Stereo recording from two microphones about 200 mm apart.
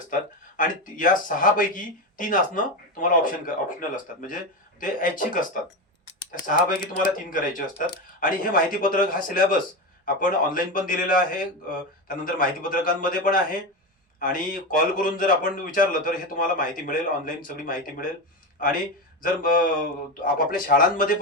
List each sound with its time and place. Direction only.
0.1 s a man's voice: 40° left (ahead or behind)